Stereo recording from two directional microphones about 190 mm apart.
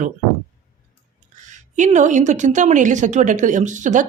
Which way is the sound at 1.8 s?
40° right (ahead or behind).